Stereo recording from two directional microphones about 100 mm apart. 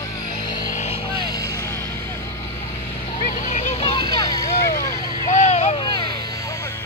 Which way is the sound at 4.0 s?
45° left (ahead or behind).